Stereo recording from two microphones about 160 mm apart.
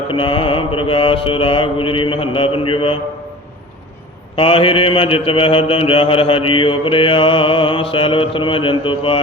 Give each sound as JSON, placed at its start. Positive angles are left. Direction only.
{"t": 0.1, "sound": "mantra", "side_deg": 30}
{"t": 4.4, "sound": "mantra", "side_deg": 35}